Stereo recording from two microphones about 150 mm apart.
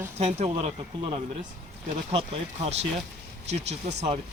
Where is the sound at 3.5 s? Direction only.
45° right (ahead or behind).